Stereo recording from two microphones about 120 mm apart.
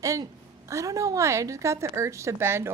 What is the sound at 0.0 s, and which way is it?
A woman's voice, 30° right (ahead or behind).